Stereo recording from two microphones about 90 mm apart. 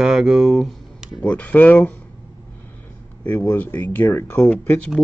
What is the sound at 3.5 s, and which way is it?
Speech, 20° left (ahead or behind).